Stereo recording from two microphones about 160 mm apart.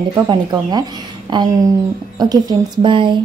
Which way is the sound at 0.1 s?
25° right (ahead or behind).